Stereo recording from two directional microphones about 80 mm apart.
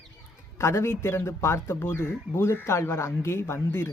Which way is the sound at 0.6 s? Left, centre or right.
Left.